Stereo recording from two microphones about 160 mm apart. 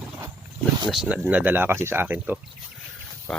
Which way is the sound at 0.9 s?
5° right (ahead or behind).